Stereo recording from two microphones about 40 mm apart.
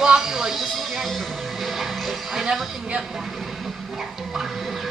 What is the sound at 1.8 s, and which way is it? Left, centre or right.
Music, centre.